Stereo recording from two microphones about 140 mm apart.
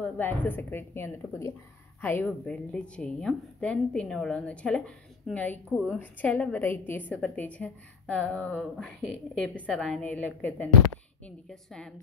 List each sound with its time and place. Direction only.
0.0 s a woman's voice: 15° left (ahead or behind)
5.7 s a woman's voice: centre (ahead or behind)
5.9 s a woman's voice: 10° left (ahead or behind)